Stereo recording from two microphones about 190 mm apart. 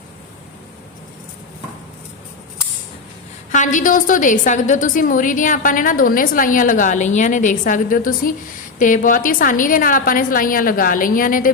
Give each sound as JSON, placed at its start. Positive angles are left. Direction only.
{"t": 3.5, "sound": "a woman's voice", "side_deg": 40}